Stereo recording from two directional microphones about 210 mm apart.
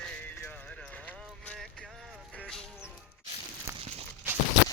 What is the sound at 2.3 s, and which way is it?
Music, 5° left (ahead or behind).